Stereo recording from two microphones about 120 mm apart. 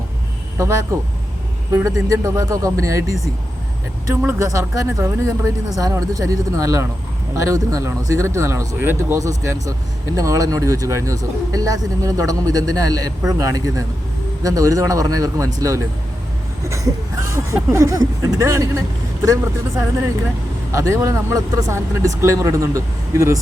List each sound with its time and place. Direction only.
0.6 s speech: 25° right (ahead or behind)